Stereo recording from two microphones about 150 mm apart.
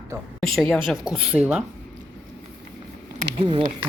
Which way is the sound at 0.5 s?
Centre (ahead or behind).